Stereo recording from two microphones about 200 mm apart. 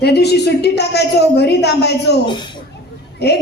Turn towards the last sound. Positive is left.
turn(degrees=55)  # may be behind; listen again after turning